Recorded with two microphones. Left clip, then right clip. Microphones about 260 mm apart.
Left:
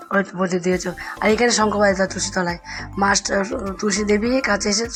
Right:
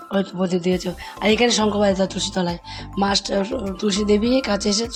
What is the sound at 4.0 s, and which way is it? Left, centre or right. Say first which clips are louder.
Speech: right 1 dB; right.